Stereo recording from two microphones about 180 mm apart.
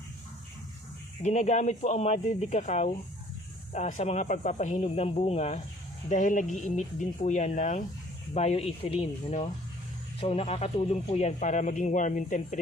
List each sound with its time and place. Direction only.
1.2 s a man's voice: 40° left (ahead or behind)